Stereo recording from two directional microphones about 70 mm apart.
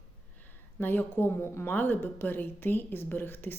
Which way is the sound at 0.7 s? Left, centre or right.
Left.